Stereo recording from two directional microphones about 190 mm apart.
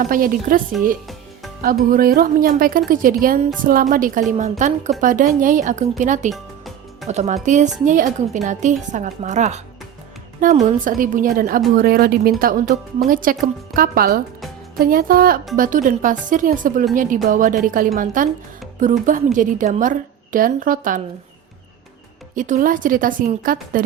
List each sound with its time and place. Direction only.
0.1 s a woman's voice: 50° right (ahead or behind)
1.6 s a woman's voice: 50° right (ahead or behind)
6.3 s music: centre (ahead or behind)
7.1 s a woman's voice: 35° right (ahead or behind)
22.4 s a woman's voice: 45° right (ahead or behind)